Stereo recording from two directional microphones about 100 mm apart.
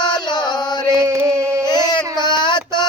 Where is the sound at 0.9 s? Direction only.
30° right (ahead or behind).